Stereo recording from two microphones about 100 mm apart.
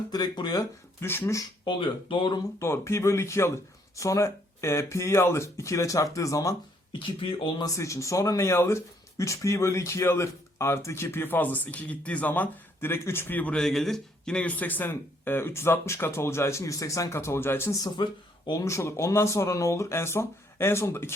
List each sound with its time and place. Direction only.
0.1 s speech: 45° left (ahead or behind)
1.0 s speech: 25° left (ahead or behind)
1.6 s speech: 55° left (ahead or behind)
2.6 s speech: 25° left (ahead or behind)
7.0 s speech: 55° left (ahead or behind)
7.6 s speech: 30° left (ahead or behind)
17.8 s speech: 45° left (ahead or behind)
18.6 s speech: 30° left (ahead or behind)